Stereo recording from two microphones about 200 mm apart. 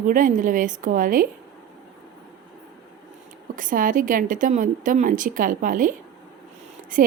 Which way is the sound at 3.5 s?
40° right (ahead or behind).